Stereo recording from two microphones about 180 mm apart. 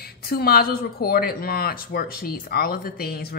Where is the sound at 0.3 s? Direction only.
55° left (ahead or behind).